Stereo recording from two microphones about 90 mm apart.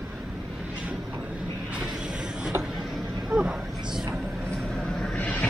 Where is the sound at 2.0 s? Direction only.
10° right (ahead or behind).